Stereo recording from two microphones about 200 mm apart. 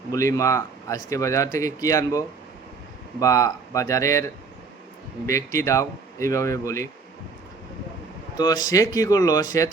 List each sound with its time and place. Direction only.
0.1 s speech: 15° left (ahead or behind)
5.3 s speech: 15° left (ahead or behind)
8.4 s speech: 20° left (ahead or behind)